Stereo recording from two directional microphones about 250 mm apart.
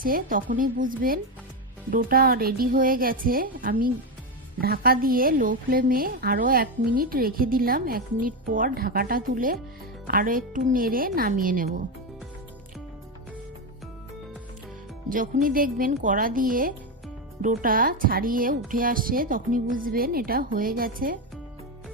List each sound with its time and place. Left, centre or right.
0.0 s a woman's voice: right
15.1 s a woman's voice: right